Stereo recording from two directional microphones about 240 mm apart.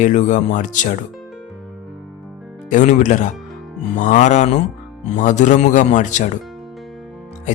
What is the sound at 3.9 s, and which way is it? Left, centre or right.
Music, left.